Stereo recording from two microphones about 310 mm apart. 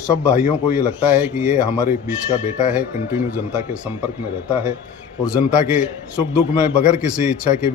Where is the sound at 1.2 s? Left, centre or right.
Centre.